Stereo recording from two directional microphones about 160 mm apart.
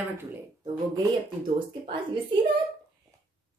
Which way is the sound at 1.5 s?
30° right (ahead or behind).